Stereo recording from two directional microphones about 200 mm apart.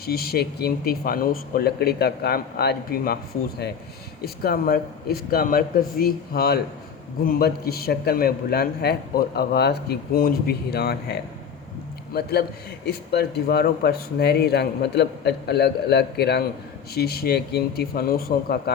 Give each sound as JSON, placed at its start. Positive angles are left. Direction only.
{"t": 0.0, "sound": "a man's voice", "side_deg": 50}
{"t": 4.4, "sound": "a man's voice", "side_deg": 50}